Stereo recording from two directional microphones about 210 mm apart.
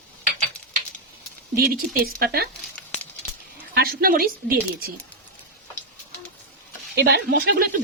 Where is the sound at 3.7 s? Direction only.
45° right (ahead or behind).